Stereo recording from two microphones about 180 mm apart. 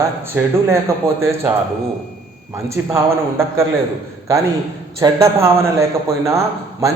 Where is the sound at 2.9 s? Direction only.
15° right (ahead or behind).